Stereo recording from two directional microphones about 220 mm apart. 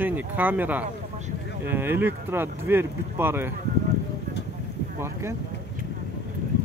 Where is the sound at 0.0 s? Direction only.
10° right (ahead or behind).